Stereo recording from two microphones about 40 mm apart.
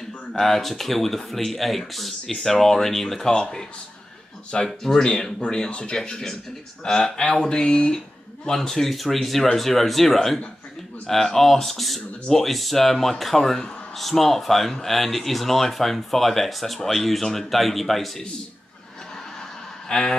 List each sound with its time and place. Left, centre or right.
0.3 s speech: centre
4.5 s speech: centre
8.5 s speech: centre
19.9 s speech: centre